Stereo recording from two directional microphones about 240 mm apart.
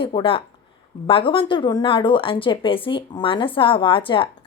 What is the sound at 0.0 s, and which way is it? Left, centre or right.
Speech, left.